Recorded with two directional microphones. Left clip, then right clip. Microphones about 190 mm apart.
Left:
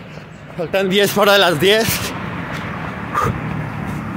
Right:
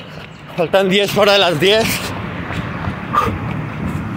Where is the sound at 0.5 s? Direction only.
20° right (ahead or behind).